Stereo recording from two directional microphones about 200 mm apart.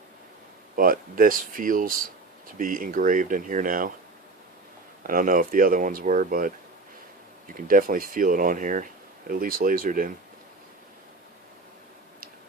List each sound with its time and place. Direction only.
0.8 s speech: 45° right (ahead or behind)
5.0 s speech: 45° right (ahead or behind)
7.5 s speech: 45° right (ahead or behind)